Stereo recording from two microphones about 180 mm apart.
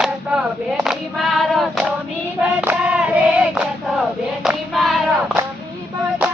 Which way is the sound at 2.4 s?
5° right (ahead or behind).